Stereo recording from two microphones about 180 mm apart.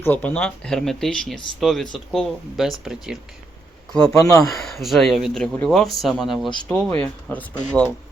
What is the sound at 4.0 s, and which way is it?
Speech, 15° left (ahead or behind).